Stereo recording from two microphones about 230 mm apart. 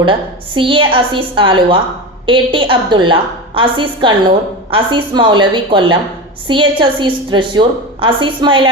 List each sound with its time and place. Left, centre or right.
0.0 s a woman's voice: right